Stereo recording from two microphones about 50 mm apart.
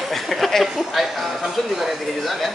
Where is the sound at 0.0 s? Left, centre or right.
Centre.